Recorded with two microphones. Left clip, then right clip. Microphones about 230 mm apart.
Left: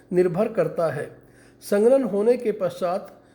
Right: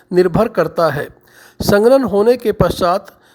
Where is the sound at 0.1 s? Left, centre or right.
Right.